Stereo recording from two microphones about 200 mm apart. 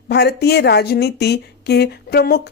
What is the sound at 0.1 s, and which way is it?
Speech, 55° left (ahead or behind).